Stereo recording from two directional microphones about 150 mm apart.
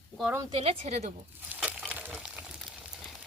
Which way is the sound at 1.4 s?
5° right (ahead or behind).